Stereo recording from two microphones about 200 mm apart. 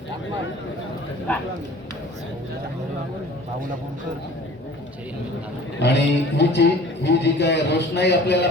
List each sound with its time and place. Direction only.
5.8 s a man's voice: 60° left (ahead or behind)